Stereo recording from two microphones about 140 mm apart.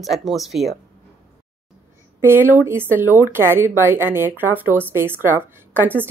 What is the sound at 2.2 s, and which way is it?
A woman's voice, 15° right (ahead or behind).